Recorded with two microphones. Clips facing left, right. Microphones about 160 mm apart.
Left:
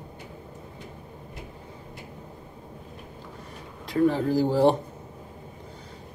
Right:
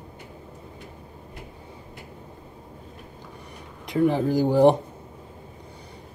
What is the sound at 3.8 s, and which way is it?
Speech, 15° right (ahead or behind).